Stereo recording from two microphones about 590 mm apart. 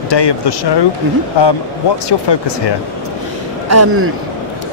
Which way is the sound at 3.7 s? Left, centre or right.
Right.